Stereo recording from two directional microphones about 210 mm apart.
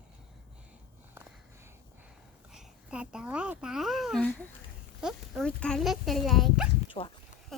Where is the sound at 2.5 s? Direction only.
5° right (ahead or behind).